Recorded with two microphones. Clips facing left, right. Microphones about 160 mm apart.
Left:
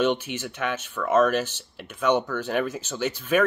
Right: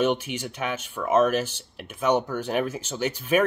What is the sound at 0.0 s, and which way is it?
Speech, 10° right (ahead or behind).